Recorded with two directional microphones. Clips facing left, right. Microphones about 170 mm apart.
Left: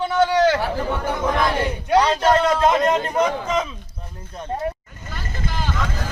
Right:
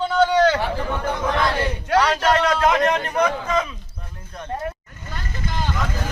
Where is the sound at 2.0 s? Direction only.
25° left (ahead or behind).